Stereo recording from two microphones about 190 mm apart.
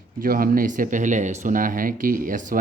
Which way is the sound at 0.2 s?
50° right (ahead or behind).